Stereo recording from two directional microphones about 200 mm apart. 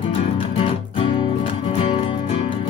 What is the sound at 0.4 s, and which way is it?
Music, 25° left (ahead or behind).